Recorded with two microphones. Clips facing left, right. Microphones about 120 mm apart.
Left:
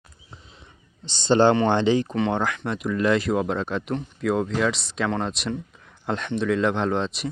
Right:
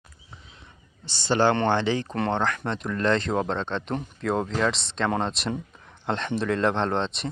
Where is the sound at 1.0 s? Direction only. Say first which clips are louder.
Left 4 dB; 20° left (ahead or behind).